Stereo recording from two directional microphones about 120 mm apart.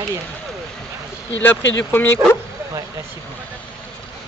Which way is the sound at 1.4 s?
20° left (ahead or behind).